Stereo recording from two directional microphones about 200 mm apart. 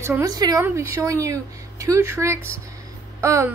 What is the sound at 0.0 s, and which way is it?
A woman's voice, 15° right (ahead or behind).